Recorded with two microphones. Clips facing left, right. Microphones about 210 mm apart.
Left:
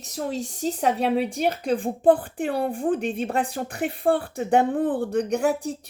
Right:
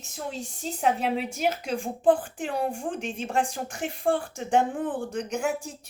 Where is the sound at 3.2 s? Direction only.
60° left (ahead or behind).